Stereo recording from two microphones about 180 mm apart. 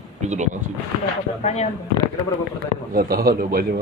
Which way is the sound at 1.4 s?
40° left (ahead or behind).